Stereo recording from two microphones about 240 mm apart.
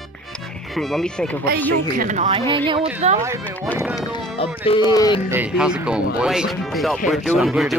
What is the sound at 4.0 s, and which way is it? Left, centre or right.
Speech, left.